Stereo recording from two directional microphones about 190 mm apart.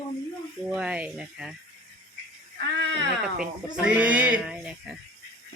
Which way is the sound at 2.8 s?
70° right (ahead or behind).